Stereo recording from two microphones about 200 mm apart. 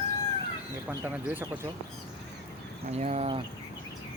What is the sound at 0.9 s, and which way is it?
Speech, 10° right (ahead or behind).